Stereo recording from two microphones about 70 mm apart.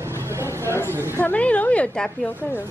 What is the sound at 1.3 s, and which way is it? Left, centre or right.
Speech, centre.